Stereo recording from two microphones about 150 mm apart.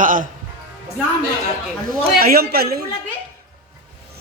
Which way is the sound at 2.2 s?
85° right.